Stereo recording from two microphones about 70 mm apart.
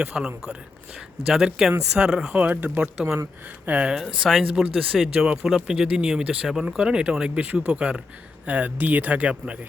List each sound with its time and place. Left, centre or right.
0.1 s speech: centre
2.3 s speech: right
3.9 s speech: centre
5.2 s speech: centre